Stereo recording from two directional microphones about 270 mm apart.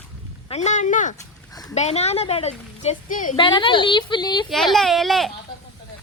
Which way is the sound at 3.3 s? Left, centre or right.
Centre.